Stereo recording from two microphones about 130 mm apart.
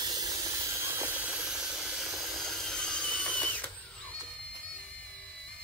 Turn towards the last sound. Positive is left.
turn(degrees=10)  # may be behind; listen again after turning